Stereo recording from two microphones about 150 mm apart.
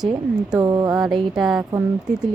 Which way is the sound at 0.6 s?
25° right (ahead or behind).